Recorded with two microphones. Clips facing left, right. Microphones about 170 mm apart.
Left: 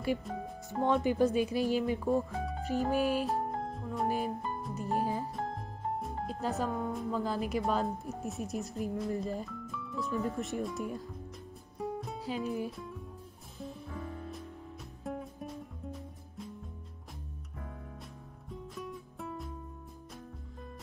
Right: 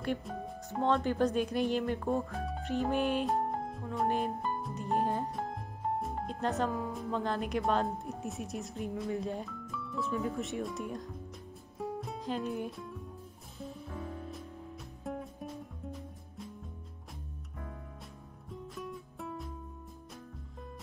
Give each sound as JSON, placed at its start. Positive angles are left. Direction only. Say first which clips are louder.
{"t": 0.0, "sound": "speech", "louder": "left 2 dB", "side_deg": 5}
{"t": 11.8, "sound": "music", "louder": "left 1 dB", "side_deg": 0}
{"t": 15.0, "sound": "music", "louder": "even", "side_deg": 0}
{"t": 18.5, "sound": "music", "louder": "even", "side_deg": 0}